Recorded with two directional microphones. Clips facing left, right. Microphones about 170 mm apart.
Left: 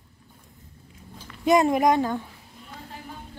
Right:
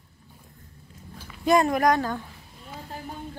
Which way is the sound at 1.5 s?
20° left (ahead or behind).